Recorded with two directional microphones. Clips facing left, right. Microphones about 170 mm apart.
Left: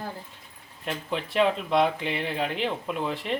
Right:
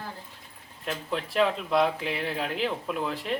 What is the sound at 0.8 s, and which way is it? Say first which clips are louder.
Speech: left 1 dB; centre (ahead or behind).